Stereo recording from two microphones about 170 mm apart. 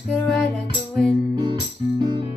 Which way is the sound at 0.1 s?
5° left (ahead or behind).